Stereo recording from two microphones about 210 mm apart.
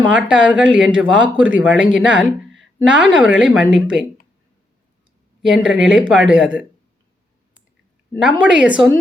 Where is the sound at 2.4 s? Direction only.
65° right (ahead or behind).